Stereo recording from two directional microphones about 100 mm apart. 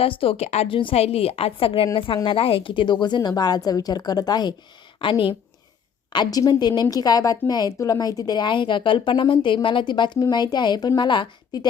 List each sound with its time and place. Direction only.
0.0 s a woman's voice: 70° left (ahead or behind); by 0.8 s 90° left
0.8 s a woman's voice: 70° left (ahead or behind); by 4.5 s 45° left (ahead or behind)
4.9 s speech: 55° left (ahead or behind)
6.1 s a woman's voice: 40° left (ahead or behind)